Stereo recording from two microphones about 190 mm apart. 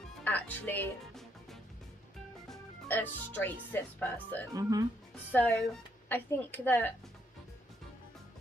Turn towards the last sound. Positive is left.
turn(degrees=10)  # may be behind; listen again after turning